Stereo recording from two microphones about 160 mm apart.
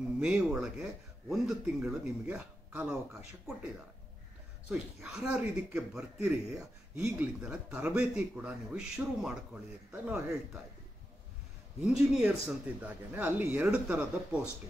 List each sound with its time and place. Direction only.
0.2 s speech: 5° right (ahead or behind)
4.6 s speech: 5° right (ahead or behind)
10.0 s speech: 15° right (ahead or behind)
11.8 s speech: 5° right (ahead or behind)